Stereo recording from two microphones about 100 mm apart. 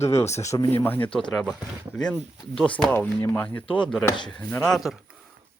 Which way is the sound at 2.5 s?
5° left (ahead or behind).